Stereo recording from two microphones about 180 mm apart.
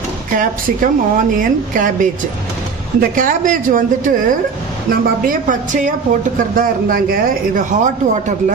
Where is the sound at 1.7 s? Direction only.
45° right (ahead or behind).